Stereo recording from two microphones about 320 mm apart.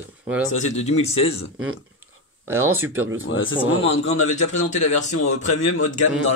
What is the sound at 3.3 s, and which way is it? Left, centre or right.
Speech, left.